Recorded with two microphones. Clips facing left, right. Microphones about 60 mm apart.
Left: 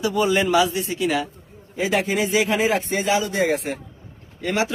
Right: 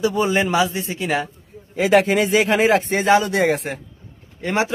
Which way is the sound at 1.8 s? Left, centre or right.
Right.